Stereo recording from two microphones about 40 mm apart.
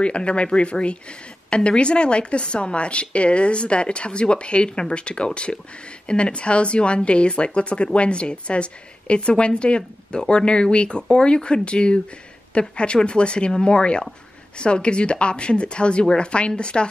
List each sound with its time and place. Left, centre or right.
0.0 s a woman's voice: left